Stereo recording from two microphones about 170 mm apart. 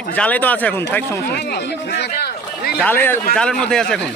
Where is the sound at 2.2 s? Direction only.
70° left (ahead or behind).